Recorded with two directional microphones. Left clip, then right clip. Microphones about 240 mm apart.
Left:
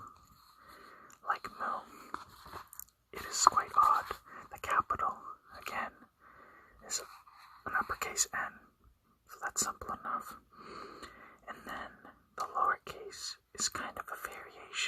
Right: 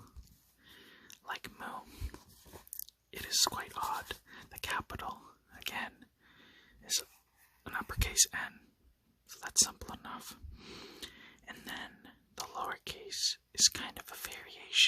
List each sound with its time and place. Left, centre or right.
0.8 s whispering: right
2.8 s whispering: right
3.8 s speech: right
5.5 s whispering: right
6.4 s a sound: right
7.6 s speech: right
9.3 s whispering: right
9.7 s speech: right